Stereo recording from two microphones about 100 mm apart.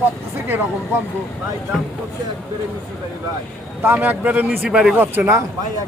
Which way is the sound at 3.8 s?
20° right (ahead or behind).